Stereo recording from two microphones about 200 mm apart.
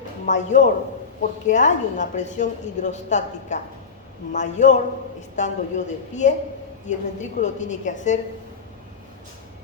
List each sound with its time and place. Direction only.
0.3 s a woman's voice: 35° left (ahead or behind)